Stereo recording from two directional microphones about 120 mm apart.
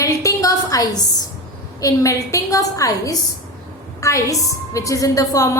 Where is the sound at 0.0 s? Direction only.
25° left (ahead or behind).